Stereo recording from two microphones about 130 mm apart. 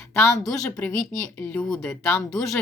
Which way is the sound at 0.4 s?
10° left (ahead or behind).